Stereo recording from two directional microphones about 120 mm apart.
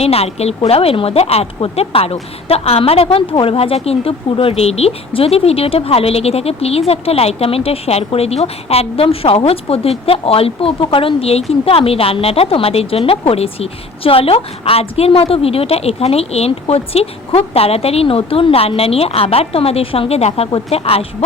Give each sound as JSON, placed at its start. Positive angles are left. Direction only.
{"t": 0.0, "sound": "a woman's voice", "side_deg": 55}